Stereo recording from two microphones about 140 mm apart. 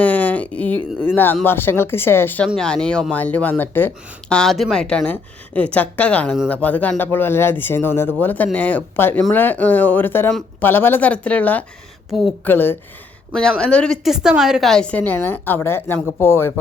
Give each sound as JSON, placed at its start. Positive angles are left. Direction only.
{"t": 0.0, "sound": "a sound", "side_deg": 10}
{"t": 0.9, "sound": "speech", "side_deg": 15}
{"t": 13.3, "sound": "a woman's voice", "side_deg": 5}